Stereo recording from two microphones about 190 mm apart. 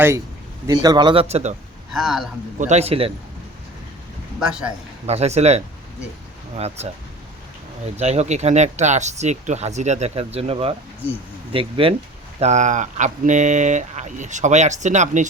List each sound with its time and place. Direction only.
0.7 s speech: 20° right (ahead or behind)
1.9 s speech: centre (ahead or behind)
2.6 s speech: 35° right (ahead or behind)
5.0 s speech: 35° right (ahead or behind)
7.9 s speech: 35° right (ahead or behind)
12.4 s speech: 40° right (ahead or behind)